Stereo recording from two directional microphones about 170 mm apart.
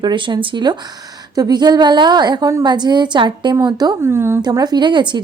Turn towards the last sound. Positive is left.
turn(degrees=-25)  # may be behind; listen again after turning